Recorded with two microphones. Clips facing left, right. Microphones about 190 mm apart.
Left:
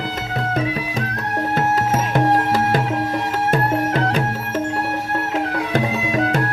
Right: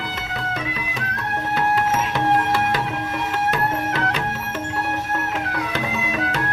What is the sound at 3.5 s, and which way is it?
Music, 45° left (ahead or behind).